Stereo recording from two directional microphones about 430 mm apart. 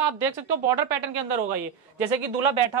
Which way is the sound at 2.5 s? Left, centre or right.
Right.